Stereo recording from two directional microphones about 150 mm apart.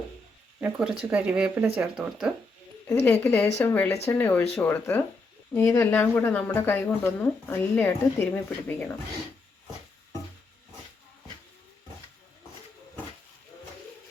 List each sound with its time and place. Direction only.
0.6 s speech: 5° right (ahead or behind)
2.9 s speech: 15° left (ahead or behind)